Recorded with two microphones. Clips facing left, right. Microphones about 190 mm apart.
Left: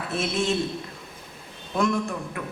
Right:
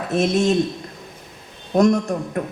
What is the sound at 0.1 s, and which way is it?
Speech, 40° right (ahead or behind).